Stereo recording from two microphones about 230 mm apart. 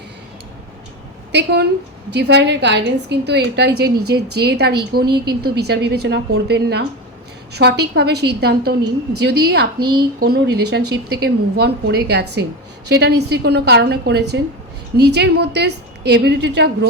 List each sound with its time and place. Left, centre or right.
1.3 s a woman's voice: right